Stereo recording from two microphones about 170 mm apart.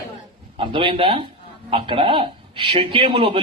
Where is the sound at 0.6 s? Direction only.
30° right (ahead or behind).